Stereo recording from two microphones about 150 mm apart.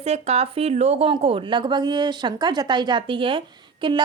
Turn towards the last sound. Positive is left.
turn(degrees=-35)  # may be behind; listen again after turning